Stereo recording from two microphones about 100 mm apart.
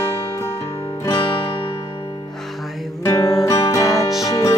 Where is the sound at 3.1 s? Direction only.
35° left (ahead or behind).